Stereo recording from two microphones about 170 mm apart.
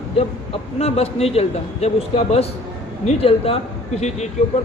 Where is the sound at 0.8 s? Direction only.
40° left (ahead or behind).